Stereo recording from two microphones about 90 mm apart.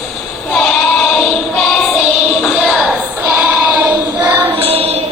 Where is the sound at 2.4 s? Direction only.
10° left (ahead or behind).